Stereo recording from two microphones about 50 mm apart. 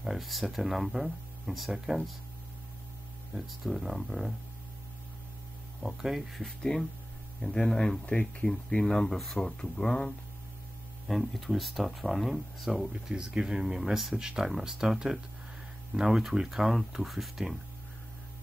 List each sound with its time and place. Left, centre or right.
0.0 s speech: centre
3.3 s speech: centre
5.8 s speech: centre
6.4 s speech: centre
9.1 s speech: centre
11.1 s speech: centre
12.9 s speech: centre
15.9 s speech: centre
16.3 s speech: centre